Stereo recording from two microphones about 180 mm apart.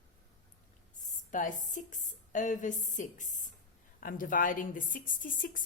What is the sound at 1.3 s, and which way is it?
A woman's voice, 45° left (ahead or behind).